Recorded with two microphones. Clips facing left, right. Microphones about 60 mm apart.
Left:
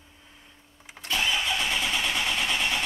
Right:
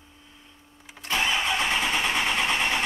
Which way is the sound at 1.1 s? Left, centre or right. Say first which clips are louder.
Right 2 dB; right.